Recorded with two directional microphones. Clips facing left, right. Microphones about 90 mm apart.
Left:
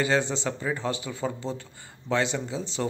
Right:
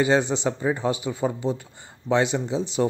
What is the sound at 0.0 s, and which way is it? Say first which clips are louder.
Speech: right 4 dB; 20° right (ahead or behind).